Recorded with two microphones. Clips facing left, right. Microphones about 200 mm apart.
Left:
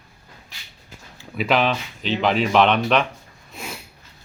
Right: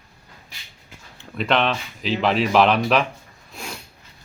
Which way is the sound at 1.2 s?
5° left (ahead or behind).